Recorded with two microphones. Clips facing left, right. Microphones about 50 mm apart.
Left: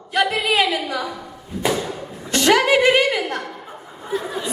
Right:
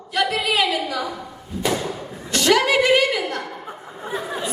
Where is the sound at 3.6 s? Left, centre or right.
Right.